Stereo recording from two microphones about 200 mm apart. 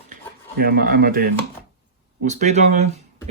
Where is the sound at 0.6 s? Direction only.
50° right (ahead or behind).